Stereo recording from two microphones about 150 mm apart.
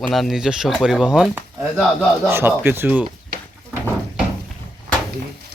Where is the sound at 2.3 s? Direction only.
15° right (ahead or behind).